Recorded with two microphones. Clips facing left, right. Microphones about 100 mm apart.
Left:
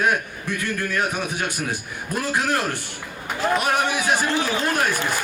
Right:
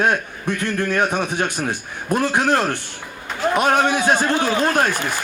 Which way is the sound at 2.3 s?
60° right (ahead or behind).